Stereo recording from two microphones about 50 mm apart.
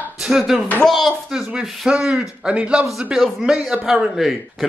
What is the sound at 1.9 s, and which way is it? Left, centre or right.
A man's voice, centre.